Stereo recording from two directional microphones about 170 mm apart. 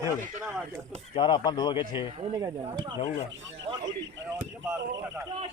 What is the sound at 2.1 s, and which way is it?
Speech, 35° right (ahead or behind).